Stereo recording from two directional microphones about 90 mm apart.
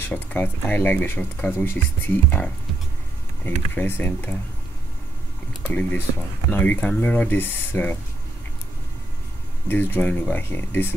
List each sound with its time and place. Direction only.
0.0 s speech: 20° left (ahead or behind)
5.7 s speech: 20° left (ahead or behind)
9.7 s speech: 25° left (ahead or behind)